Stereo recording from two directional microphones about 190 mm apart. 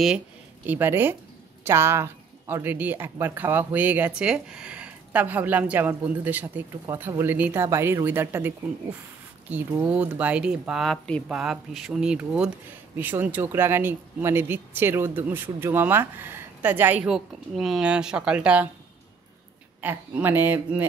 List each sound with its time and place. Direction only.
0.7 s speech: 10° right (ahead or behind)
19.8 s speech: 10° right (ahead or behind)